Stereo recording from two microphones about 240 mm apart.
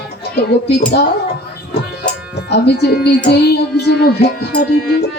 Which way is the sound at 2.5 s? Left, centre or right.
Left.